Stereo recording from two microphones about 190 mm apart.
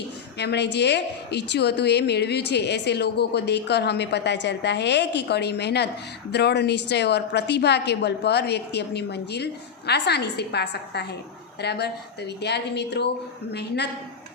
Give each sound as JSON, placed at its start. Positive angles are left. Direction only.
{"t": 0.3, "sound": "a woman's voice", "side_deg": 65}